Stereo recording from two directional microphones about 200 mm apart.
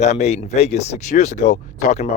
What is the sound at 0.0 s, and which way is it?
Speech, 35° left (ahead or behind).